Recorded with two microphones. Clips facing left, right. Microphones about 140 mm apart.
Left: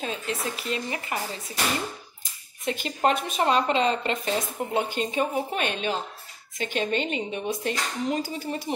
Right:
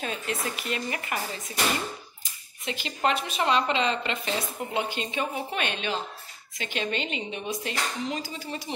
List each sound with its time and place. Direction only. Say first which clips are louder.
0.0 s speech: left 1 dB; 30° left (ahead or behind)
2.6 s a woman's voice: left 3 dB; 50° left (ahead or behind)